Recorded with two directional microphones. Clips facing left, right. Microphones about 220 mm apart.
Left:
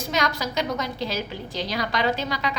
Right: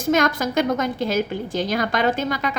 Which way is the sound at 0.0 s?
50° right (ahead or behind).